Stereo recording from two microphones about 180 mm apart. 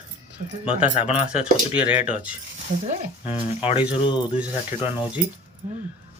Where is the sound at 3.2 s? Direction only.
30° left (ahead or behind).